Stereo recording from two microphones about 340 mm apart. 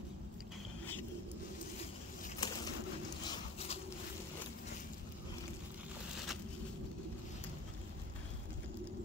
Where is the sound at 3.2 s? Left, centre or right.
Centre.